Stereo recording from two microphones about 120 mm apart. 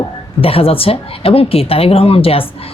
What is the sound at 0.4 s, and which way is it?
A woman's voice, 50° left (ahead or behind).